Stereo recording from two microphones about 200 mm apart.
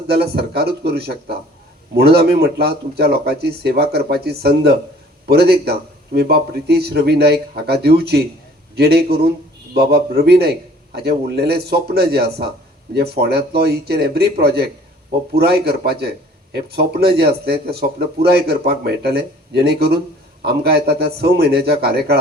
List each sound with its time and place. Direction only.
0.1 s a man's voice: 50° right (ahead or behind)